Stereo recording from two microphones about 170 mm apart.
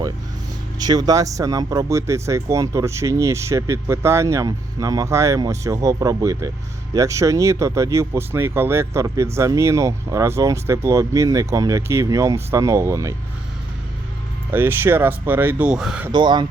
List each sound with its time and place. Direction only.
0.8 s speech: 25° right (ahead or behind)
14.5 s speech: 10° right (ahead or behind)
16.1 s speech: 25° right (ahead or behind)